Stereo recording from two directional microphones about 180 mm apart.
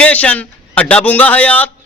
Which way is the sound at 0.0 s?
5° left (ahead or behind).